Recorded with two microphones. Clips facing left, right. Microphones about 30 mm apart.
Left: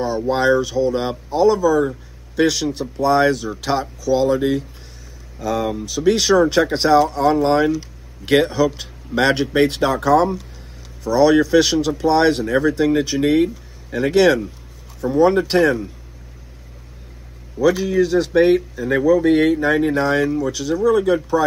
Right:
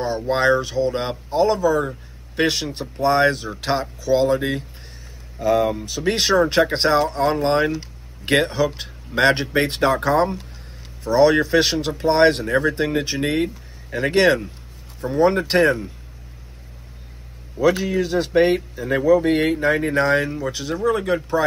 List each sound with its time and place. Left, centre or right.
0.3 s speech: centre
2.3 s speech: right; by 4.6 s centre
5.4 s speech: right
17.6 s speech: right